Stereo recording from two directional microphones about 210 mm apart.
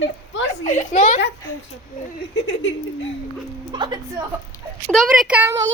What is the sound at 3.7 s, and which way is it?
Music, 20° right (ahead or behind).